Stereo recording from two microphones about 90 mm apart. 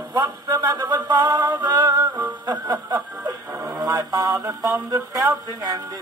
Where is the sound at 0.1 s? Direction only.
45° right (ahead or behind).